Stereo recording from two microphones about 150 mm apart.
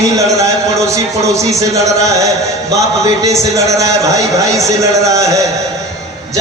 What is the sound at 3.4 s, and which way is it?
Speech, 20° right (ahead or behind).